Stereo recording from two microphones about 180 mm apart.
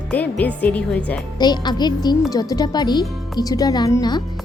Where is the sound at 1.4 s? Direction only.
25° left (ahead or behind).